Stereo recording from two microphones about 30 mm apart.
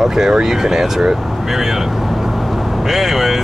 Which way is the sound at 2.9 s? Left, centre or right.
Centre.